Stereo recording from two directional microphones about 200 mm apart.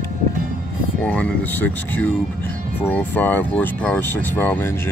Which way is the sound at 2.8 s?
10° left (ahead or behind).